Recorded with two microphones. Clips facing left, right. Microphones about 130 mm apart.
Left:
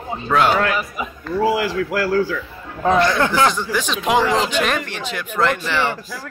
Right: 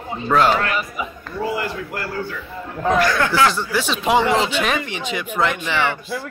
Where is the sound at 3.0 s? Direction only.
20° left (ahead or behind).